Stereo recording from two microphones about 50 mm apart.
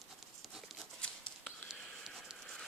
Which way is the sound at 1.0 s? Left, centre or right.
Centre.